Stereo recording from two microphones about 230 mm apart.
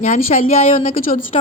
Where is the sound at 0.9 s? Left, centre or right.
Left.